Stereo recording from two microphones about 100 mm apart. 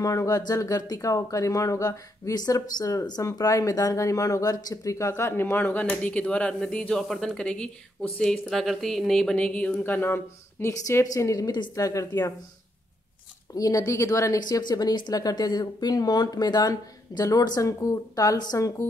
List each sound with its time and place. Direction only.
0.0 s speech: 35° left (ahead or behind)
13.6 s speech: 35° left (ahead or behind)
14.6 s speech: 45° left (ahead or behind)